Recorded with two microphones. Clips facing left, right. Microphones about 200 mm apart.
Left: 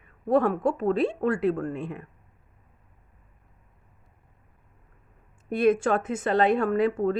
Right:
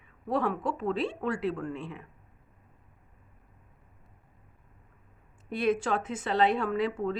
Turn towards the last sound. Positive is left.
turn(degrees=50)  # may be behind; listen again after turning